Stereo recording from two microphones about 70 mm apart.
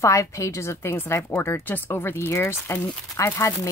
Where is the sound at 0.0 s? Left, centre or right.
Left.